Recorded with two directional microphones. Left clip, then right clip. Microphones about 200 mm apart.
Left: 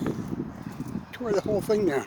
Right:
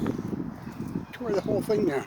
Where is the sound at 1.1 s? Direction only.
20° left (ahead or behind).